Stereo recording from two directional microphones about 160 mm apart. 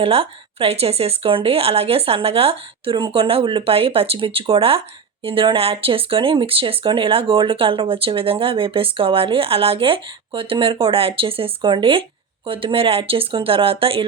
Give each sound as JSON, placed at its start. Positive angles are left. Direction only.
{"t": 0.0, "sound": "speech", "side_deg": -35}